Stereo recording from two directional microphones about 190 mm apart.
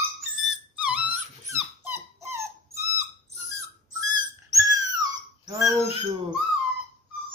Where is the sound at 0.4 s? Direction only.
5° right (ahead or behind).